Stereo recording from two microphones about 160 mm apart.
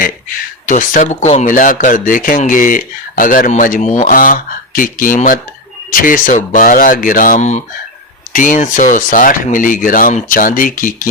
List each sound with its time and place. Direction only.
0.6 s speech: 55° left (ahead or behind)